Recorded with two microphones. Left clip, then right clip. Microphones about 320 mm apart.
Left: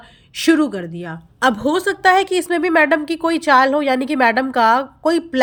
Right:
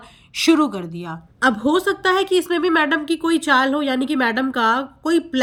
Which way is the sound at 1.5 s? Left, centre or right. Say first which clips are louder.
Even; centre.